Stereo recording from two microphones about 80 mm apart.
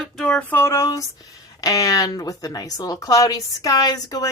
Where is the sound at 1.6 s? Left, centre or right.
Left.